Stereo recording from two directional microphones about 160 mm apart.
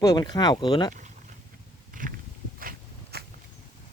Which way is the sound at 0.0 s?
25° left (ahead or behind).